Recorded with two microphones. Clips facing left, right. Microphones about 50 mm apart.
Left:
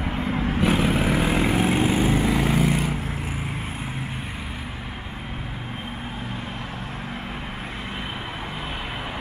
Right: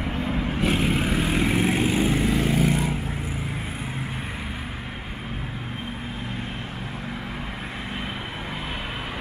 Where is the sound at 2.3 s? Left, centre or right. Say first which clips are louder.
Left 1 dB; centre.